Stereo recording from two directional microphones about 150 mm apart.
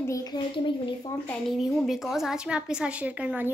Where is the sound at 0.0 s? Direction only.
25° left (ahead or behind).